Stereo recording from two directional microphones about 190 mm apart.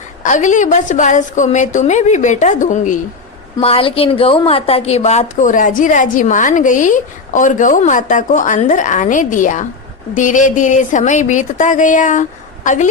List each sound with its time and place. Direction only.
0.2 s a woman's voice: 40° left (ahead or behind)
3.6 s a woman's voice: 30° left (ahead or behind)